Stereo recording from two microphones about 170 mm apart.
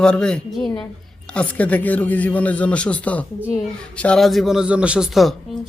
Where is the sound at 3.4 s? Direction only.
5° right (ahead or behind).